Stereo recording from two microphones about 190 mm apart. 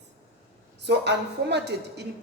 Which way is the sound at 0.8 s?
65° right (ahead or behind).